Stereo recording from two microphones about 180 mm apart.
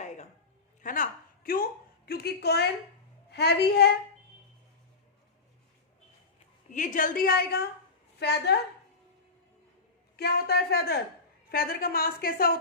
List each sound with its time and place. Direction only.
0.8 s a sound: 50° left (ahead or behind)
1.5 s a woman's voice: 55° left (ahead or behind)
2.0 s a sound: 60° left (ahead or behind)
3.3 s a woman's voice: 65° left (ahead or behind)
6.7 s a woman's voice: 45° left (ahead or behind); by 8.5 s 70° left (ahead or behind)
10.2 s a woman's voice: 60° left (ahead or behind)